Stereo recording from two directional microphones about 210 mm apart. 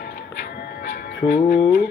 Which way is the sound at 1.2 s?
40° left (ahead or behind).